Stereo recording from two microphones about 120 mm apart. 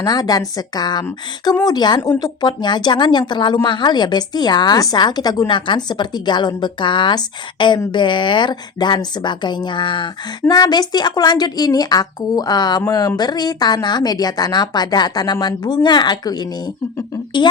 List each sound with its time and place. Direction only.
0.0 s speech: 35° left (ahead or behind)